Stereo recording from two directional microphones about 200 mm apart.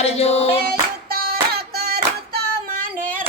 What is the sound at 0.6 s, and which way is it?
Child singing, 45° right (ahead or behind).